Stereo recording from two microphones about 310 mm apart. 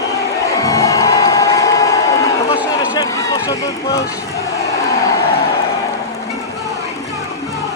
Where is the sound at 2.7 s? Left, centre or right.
Centre.